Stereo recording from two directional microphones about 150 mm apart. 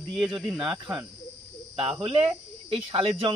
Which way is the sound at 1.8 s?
40° right (ahead or behind).